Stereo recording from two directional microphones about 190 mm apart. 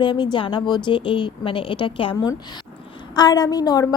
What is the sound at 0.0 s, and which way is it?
A woman's voice, 25° left (ahead or behind).